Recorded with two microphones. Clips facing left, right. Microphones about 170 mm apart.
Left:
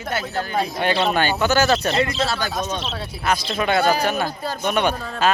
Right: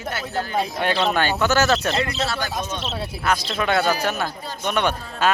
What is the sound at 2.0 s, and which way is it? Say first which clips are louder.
Speech: left 3 dB; 30° left (ahead or behind).